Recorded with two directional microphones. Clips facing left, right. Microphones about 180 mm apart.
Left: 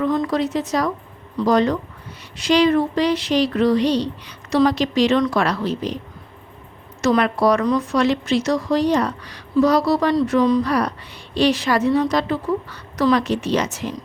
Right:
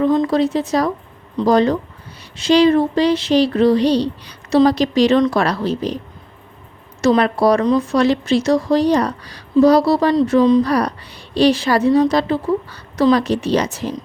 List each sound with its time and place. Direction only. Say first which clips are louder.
0.0 s speech: right 5 dB; 25° right (ahead or behind)
7.0 s speech: right 3 dB; 30° right (ahead or behind)
10.6 s speech: right 3 dB; 35° right (ahead or behind)